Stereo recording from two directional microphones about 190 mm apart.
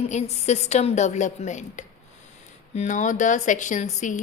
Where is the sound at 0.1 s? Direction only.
35° left (ahead or behind).